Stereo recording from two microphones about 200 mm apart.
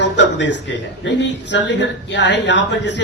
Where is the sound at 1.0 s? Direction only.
60° left (ahead or behind).